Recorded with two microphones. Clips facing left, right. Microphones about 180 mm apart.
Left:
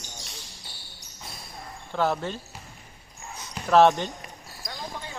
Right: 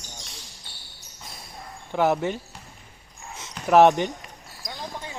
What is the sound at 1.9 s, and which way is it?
Speech, 15° right (ahead or behind).